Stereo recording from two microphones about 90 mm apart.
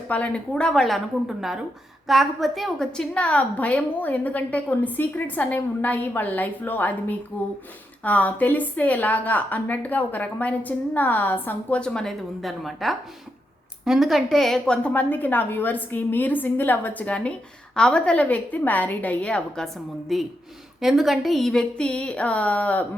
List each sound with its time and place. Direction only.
0.1 s a woman's voice: 15° left (ahead or behind)
14.8 s a woman's voice: 20° left (ahead or behind)